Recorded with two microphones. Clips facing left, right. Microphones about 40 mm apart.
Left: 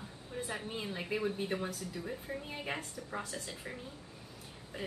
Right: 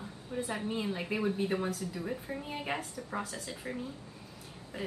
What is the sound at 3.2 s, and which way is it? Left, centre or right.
Speech, centre.